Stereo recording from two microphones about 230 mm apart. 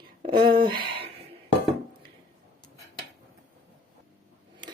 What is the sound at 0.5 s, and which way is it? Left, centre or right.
Speech, right.